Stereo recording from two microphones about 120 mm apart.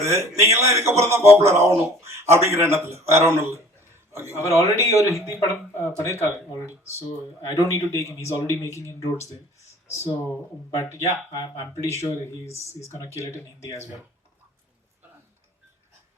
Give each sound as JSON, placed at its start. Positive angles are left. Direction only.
{"t": 0.0, "sound": "a man's voice", "side_deg": -25}
{"t": 4.4, "sound": "speech", "side_deg": 25}